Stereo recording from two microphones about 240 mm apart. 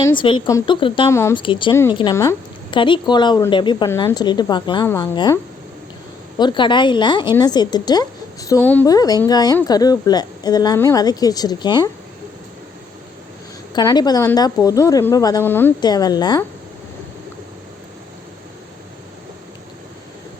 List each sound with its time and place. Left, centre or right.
0.2 s a woman's voice: centre
6.4 s a woman's voice: centre
13.7 s a woman's voice: centre